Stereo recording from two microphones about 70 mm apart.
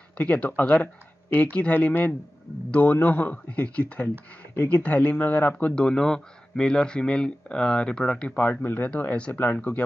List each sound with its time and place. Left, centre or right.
0.2 s speech: centre
8.5 s speech: left